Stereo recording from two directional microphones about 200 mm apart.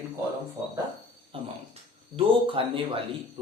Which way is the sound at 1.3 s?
30° right (ahead or behind).